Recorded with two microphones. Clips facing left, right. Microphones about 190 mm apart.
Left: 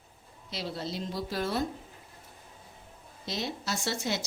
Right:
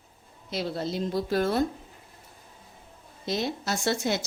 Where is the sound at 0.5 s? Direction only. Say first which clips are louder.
Right 6 dB; 50° right (ahead or behind).